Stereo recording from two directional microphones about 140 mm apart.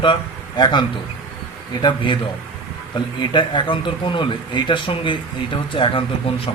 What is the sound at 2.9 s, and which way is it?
A man's voice, 35° left (ahead or behind).